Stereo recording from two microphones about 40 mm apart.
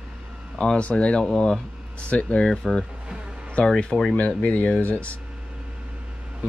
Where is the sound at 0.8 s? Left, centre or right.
Left.